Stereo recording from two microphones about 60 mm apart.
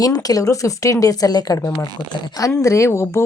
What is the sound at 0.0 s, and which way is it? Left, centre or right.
Speech, left.